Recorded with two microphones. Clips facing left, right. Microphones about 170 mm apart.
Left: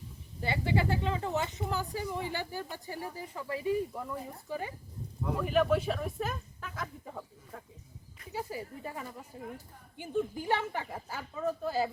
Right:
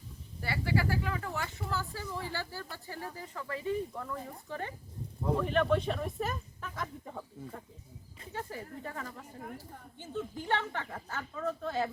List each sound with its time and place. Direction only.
0.4 s speech: 20° left (ahead or behind)